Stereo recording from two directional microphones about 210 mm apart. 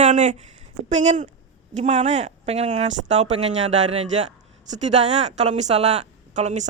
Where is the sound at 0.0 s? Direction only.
35° right (ahead or behind).